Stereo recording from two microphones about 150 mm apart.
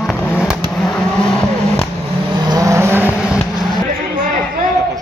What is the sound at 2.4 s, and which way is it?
Vehicle, 20° right (ahead or behind).